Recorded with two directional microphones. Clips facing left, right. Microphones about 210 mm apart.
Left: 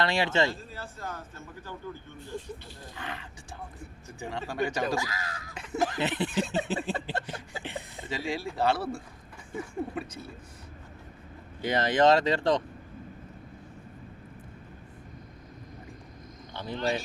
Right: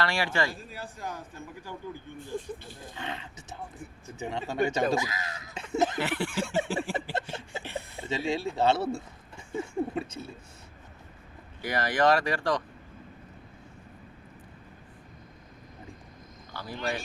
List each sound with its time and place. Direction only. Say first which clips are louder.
0.0 s speech: left 3 dB; 20° left (ahead or behind)
0.6 s a man's voice: right 1 dB; 15° right (ahead or behind)
2.1 s speech: right 3 dB; 50° right (ahead or behind)
2.9 s speech: right 2 dB; 25° right (ahead or behind)
6.0 s speech: left 1 dB; 20° left (ahead or behind)
6.9 s a sound: right 1 dB; 20° right (ahead or behind)
7.6 s speech: right 1 dB; 15° left (ahead or behind)
8.1 s speech: right 3 dB; 25° right (ahead or behind)
11.6 s speech: left 2 dB; 20° left (ahead or behind)
16.5 s a sound: left 3 dB; 20° left (ahead or behind)